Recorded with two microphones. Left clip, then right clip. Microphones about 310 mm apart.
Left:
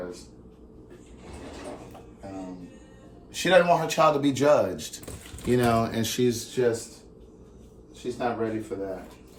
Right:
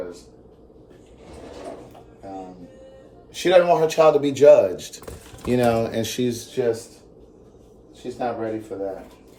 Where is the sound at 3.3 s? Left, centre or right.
Centre.